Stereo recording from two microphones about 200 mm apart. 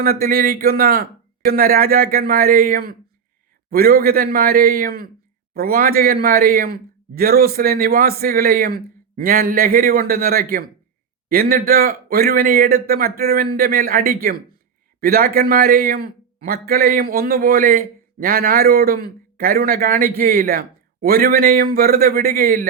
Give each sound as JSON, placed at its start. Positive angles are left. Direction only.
{"t": 0.0, "sound": "a man's voice", "side_deg": -50}